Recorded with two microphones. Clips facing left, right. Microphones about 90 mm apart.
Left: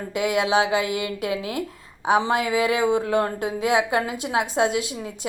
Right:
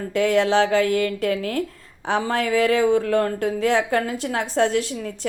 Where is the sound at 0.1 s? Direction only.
15° left (ahead or behind).